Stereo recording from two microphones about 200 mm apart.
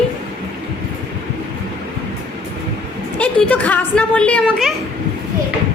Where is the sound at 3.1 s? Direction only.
5° left (ahead or behind).